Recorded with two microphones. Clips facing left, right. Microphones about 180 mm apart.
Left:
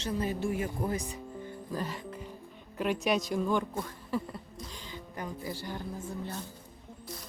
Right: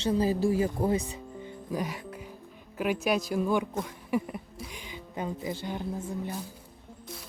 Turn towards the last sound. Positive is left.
turn(degrees=-15)  # may be behind; listen again after turning